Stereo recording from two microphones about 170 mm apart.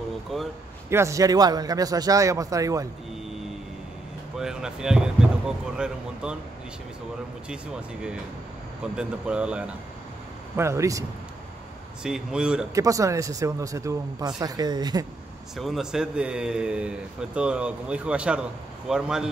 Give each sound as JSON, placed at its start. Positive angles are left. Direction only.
{"t": 0.3, "sound": "a man's voice", "side_deg": 0}
{"t": 0.8, "sound": "speech", "side_deg": -15}
{"t": 4.4, "sound": "a man's voice", "side_deg": -5}
{"t": 6.2, "sound": "a man's voice", "side_deg": -5}
{"t": 8.9, "sound": "a man's voice", "side_deg": -5}
{"t": 10.5, "sound": "speech", "side_deg": -15}
{"t": 12.0, "sound": "a man's voice", "side_deg": -5}
{"t": 12.7, "sound": "speech", "side_deg": -20}
{"t": 15.5, "sound": "a man's voice", "side_deg": 0}